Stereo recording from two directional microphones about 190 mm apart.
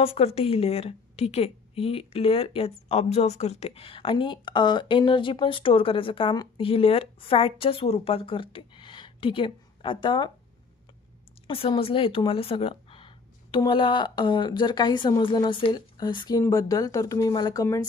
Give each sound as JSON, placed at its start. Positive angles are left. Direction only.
{"t": 0.0, "sound": "a woman's voice", "side_deg": 30}
{"t": 11.4, "sound": "a woman's voice", "side_deg": 25}